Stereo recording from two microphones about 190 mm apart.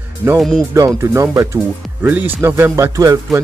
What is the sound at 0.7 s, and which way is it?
Speech, 15° right (ahead or behind).